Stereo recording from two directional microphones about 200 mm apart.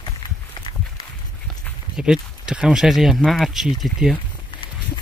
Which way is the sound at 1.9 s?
5° right (ahead or behind).